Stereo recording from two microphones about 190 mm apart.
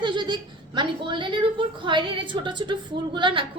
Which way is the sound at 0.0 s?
25° right (ahead or behind).